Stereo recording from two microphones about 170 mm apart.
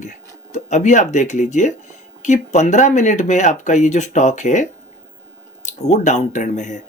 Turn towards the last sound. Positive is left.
turn(degrees=45)  # may be behind; listen again after turning